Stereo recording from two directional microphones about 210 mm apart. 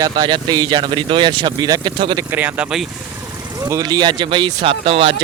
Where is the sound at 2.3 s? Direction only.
5° right (ahead or behind).